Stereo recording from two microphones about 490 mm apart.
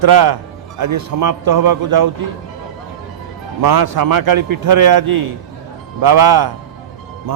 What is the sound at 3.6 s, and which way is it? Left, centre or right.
A man's voice, right.